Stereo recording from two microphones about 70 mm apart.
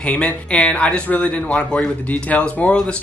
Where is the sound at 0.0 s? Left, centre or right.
Centre.